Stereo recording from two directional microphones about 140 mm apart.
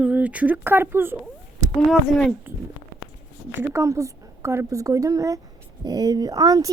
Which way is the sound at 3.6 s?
20° right (ahead or behind).